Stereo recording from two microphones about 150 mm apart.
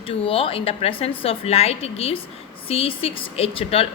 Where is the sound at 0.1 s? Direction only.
35° left (ahead or behind).